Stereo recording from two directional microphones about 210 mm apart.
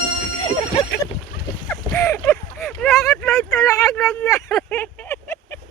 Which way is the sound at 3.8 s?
Centre (ahead or behind).